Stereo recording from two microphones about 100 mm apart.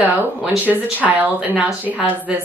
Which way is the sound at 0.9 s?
15° right (ahead or behind).